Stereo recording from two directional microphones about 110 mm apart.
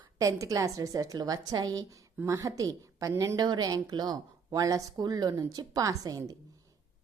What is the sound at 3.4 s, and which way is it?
A woman's voice, 40° right (ahead or behind).